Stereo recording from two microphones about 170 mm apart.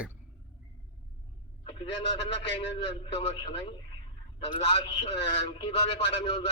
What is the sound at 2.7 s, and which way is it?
A man's voice, 35° left (ahead or behind).